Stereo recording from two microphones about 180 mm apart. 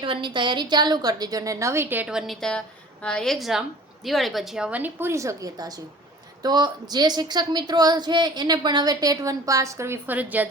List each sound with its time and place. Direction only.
0.0 s a woman's voice: 25° right (ahead or behind); by 10.4 s 10° right (ahead or behind)